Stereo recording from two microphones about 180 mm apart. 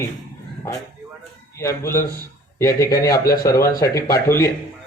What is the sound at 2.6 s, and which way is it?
Speech, 15° left (ahead or behind).